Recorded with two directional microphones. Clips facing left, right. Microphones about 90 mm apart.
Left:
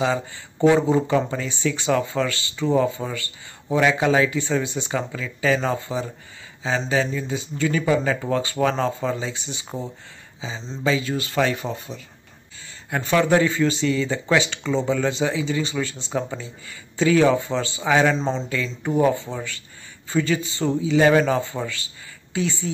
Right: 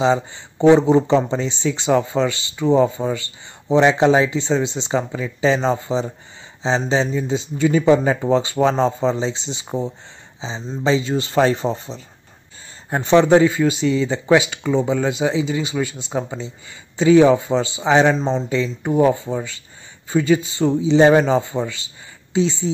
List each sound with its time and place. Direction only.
0.0 s speech: 20° right (ahead or behind)